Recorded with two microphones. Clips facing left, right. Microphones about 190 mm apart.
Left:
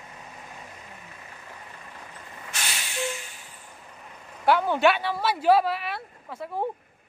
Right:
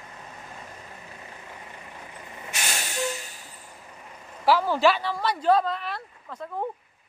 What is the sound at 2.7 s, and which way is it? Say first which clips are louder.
Snort: right 2 dB; 45° right (ahead or behind).